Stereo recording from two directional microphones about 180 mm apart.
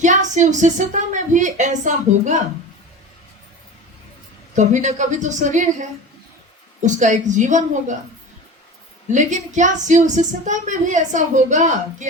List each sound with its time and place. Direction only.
0.0 s speech: 45° right (ahead or behind)
4.5 s speech: 40° right (ahead or behind)
6.8 s speech: 45° right (ahead or behind)
9.1 s speech: 45° right (ahead or behind)